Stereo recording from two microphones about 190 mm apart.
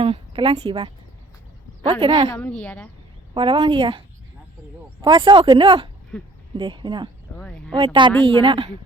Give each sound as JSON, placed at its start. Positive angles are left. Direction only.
{"t": 0.0, "sound": "speech", "side_deg": -25}
{"t": 2.4, "sound": "speech", "side_deg": 5}
{"t": 3.3, "sound": "speech", "side_deg": -25}
{"t": 5.0, "sound": "speech", "side_deg": -25}
{"t": 7.3, "sound": "a sound", "side_deg": 5}
{"t": 7.9, "sound": "speech", "side_deg": -25}